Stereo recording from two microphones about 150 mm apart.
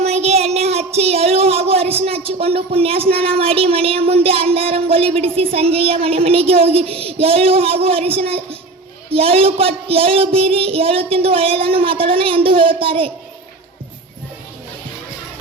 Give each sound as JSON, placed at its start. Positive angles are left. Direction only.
{"t": 0.0, "sound": "speech", "side_deg": -45}
{"t": 9.1, "sound": "child singing", "side_deg": -40}